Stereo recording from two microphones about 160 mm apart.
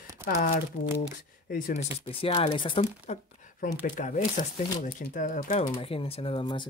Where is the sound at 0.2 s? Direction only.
15° right (ahead or behind).